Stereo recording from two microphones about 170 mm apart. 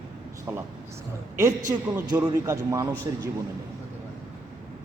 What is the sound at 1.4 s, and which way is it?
A man's voice, 15° right (ahead or behind).